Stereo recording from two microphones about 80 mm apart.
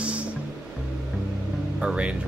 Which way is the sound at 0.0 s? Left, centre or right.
Centre.